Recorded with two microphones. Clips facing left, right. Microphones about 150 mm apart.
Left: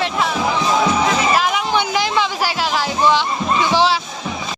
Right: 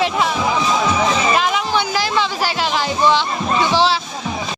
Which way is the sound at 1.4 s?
10° left (ahead or behind).